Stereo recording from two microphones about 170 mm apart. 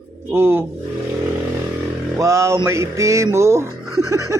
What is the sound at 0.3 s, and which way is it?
Speech, 15° right (ahead or behind).